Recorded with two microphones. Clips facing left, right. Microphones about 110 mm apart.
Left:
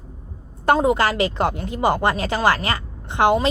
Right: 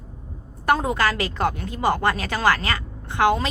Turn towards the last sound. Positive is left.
turn(degrees=20)  # may be behind; listen again after turning